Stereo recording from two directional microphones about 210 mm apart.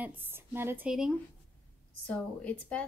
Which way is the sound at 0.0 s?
10° right (ahead or behind).